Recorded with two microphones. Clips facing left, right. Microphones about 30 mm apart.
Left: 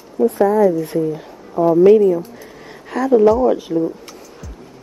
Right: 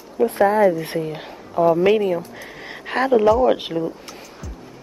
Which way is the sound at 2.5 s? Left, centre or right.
Right.